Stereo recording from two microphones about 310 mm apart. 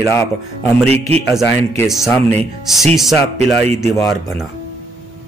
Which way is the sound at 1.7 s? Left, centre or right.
Centre.